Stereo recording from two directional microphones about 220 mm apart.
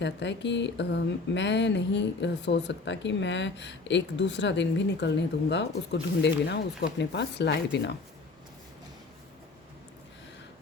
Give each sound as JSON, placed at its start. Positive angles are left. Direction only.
{"t": 0.0, "sound": "speech", "side_deg": 55}